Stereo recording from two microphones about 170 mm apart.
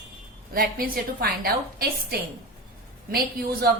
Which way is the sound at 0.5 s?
60° right (ahead or behind).